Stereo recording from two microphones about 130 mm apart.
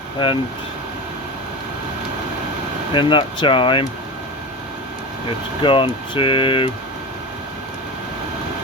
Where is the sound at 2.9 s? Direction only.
40° left (ahead or behind).